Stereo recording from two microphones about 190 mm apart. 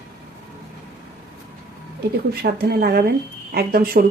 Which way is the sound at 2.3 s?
55° right (ahead or behind).